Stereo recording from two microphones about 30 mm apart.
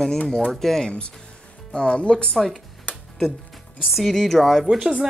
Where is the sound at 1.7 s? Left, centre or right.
Left.